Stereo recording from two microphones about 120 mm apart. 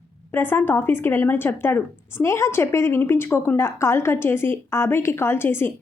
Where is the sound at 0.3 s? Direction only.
20° left (ahead or behind).